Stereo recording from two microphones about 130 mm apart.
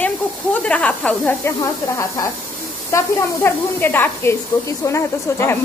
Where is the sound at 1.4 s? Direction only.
25° left (ahead or behind).